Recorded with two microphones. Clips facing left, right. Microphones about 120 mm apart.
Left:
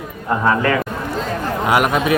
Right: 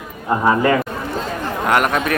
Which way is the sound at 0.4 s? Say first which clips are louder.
Right 2 dB; 15° right (ahead or behind).